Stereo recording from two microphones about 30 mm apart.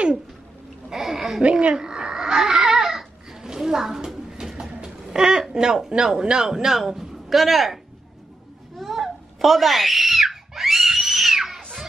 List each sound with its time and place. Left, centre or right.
0.8 s a sound: centre
1.4 s speech: right
1.8 s babbling: right
3.5 s a woman's voice: centre
4.3 s bird: centre
4.8 s a sound: right
5.5 s a man's voice: right; by 7.7 s centre
8.7 s screaming: centre